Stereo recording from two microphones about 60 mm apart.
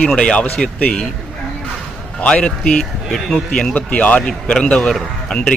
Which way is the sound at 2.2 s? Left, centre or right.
Centre.